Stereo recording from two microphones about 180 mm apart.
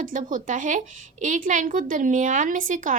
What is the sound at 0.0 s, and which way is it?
A woman's voice, 45° right (ahead or behind).